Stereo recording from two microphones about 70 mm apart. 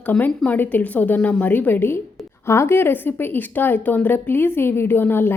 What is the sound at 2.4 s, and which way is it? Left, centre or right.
A woman's voice, left.